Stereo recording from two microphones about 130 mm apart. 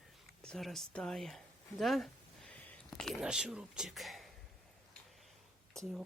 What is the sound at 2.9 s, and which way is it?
Speech, centre (ahead or behind).